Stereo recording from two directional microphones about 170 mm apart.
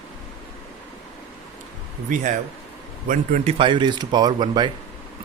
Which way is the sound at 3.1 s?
45° right (ahead or behind).